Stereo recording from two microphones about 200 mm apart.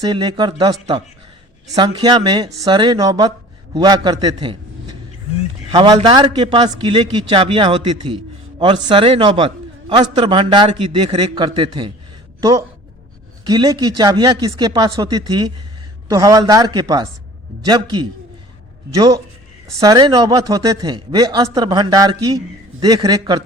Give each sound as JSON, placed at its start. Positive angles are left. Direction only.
{"t": 0.0, "sound": "a man's voice", "side_deg": -20}
{"t": 5.7, "sound": "a man's voice", "side_deg": -25}